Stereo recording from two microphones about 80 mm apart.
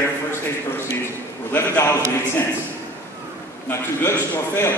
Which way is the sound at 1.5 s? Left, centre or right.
Left.